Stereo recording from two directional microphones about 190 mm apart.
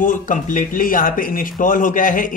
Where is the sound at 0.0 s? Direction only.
45° left (ahead or behind).